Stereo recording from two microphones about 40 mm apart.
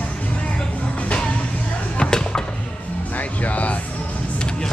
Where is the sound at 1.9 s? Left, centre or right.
Centre.